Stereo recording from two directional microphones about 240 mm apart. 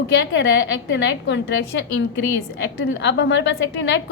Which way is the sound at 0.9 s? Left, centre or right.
Left.